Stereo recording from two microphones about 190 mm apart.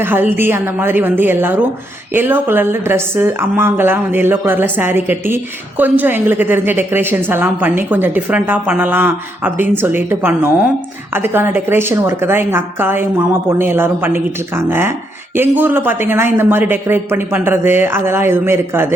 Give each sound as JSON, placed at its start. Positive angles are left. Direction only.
{"t": 0.0, "sound": "a woman's voice", "side_deg": -10}